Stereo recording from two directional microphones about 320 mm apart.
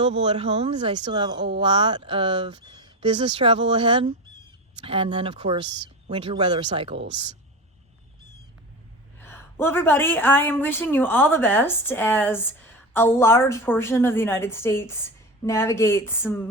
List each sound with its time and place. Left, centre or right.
0.0 s speech: centre
9.2 s a woman's voice: centre